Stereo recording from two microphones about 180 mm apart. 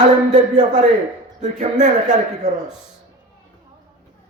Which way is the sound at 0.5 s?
45° right (ahead or behind).